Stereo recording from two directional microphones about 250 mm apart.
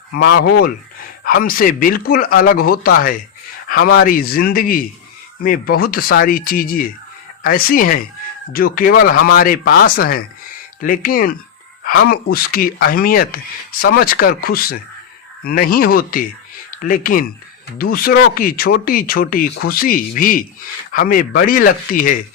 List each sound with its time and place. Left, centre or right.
0.2 s speech: left